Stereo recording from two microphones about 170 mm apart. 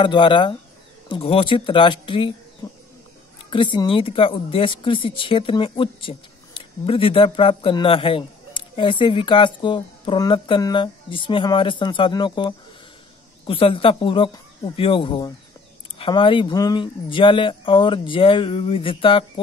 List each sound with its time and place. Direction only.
0.0 s a woman's voice: 30° left (ahead or behind)
3.4 s a woman's voice: 30° left (ahead or behind)